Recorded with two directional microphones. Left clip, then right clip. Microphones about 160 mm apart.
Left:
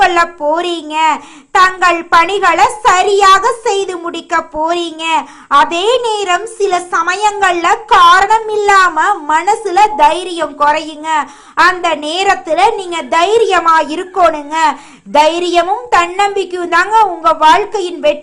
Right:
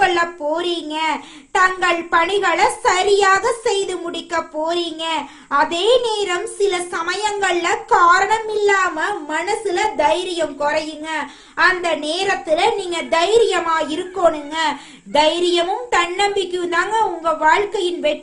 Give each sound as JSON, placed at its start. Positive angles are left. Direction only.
{"t": 0.0, "sound": "a child's voice", "side_deg": 25}